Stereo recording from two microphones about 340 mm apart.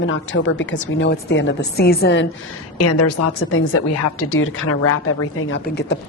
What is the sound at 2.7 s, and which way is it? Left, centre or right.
A woman's voice, left.